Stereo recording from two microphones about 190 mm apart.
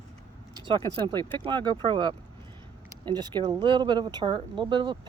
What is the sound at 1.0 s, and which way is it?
Speech, 25° right (ahead or behind).